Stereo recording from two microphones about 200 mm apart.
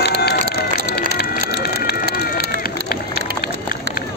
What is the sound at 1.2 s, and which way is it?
Run, 50° left (ahead or behind).